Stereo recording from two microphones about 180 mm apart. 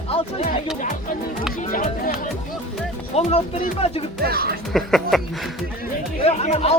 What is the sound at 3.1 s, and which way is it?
Speech, 35° left (ahead or behind).